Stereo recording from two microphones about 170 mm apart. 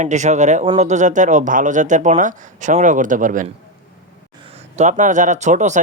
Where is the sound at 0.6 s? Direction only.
30° right (ahead or behind).